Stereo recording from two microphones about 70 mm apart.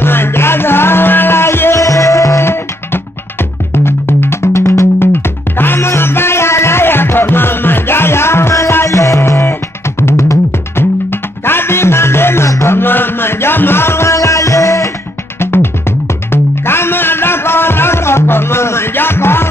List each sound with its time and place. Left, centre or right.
0.0 s music: left
1.8 s music: left
2.4 s music: left
12.4 s music: left
12.7 s music: left
15.4 s music: left